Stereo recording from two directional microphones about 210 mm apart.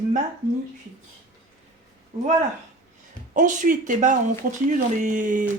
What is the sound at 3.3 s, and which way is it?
Speech, 40° right (ahead or behind).